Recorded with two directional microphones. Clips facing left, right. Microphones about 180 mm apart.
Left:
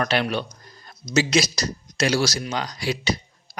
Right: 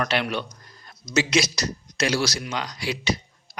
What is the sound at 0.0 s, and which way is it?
Speech, 40° left (ahead or behind).